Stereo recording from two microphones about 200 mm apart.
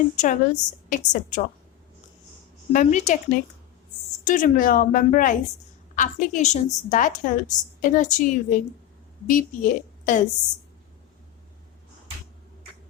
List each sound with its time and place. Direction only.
0.2 s a woman's voice: 40° left (ahead or behind)
2.7 s a woman's voice: 40° left (ahead or behind)